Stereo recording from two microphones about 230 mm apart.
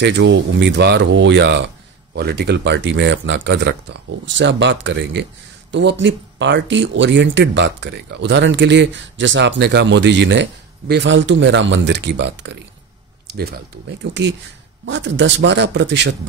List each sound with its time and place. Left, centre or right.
0.0 s speech: right